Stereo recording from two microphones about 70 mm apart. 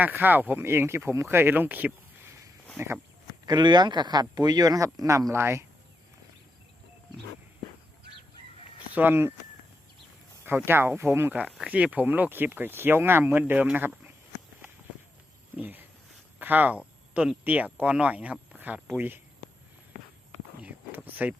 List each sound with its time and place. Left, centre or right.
0.0 s speech: right
0.6 s speech: right
2.7 s speech: right
3.4 s speech: right
5.3 s speech: right
8.9 s speech: right
10.4 s speech: right
11.3 s speech: right
15.5 s speech: right
16.4 s a sound: right
17.4 s speech: right
20.6 s a sound: right